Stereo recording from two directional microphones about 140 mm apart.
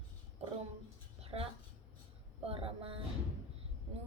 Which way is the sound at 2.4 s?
45° right (ahead or behind).